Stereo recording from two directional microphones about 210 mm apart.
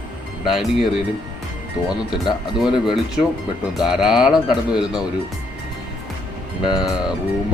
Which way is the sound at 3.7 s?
Centre (ahead or behind).